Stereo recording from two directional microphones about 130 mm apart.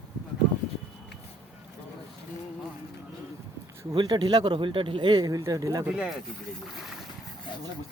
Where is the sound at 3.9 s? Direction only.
35° right (ahead or behind).